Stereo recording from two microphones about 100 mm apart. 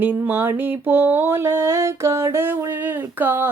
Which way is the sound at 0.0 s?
20° right (ahead or behind).